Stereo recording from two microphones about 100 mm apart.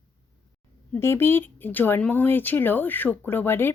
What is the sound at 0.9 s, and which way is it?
A woman's voice, 25° left (ahead or behind).